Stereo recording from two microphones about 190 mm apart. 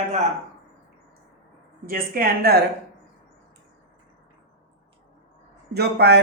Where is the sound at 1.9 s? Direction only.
50° right (ahead or behind).